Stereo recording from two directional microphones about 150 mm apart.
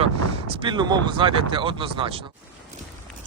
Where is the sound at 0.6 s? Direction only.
30° right (ahead or behind).